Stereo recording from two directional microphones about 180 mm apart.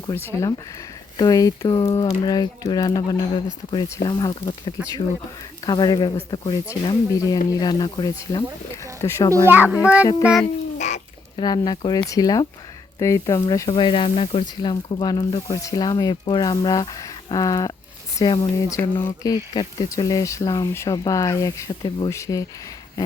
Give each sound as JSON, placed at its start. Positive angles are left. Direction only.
{"t": 0.1, "sound": "speech", "side_deg": 15}
{"t": 9.3, "sound": "a child's voice", "side_deg": -10}
{"t": 10.8, "sound": "bird", "side_deg": 40}
{"t": 11.3, "sound": "speech", "side_deg": 25}